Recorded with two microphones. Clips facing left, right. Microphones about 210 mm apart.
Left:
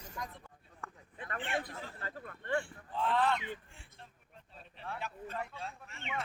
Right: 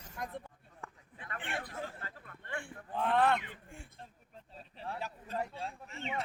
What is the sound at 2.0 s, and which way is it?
Speech, 50° left (ahead or behind).